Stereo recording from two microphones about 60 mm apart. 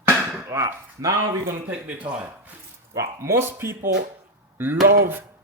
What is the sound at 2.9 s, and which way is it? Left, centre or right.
Speech, right.